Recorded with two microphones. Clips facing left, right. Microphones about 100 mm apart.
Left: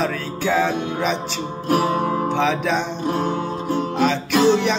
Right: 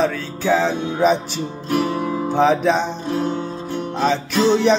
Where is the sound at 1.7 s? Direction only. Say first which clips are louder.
Left 2 dB; 45° left (ahead or behind).